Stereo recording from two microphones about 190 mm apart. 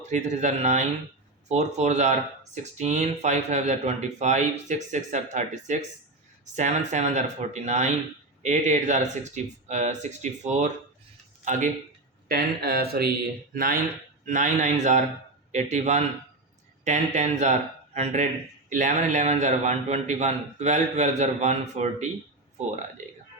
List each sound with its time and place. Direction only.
0.1 s a man's voice: 40° right (ahead or behind)
12.3 s a man's voice: 55° right (ahead or behind); by 22.1 s 35° right (ahead or behind)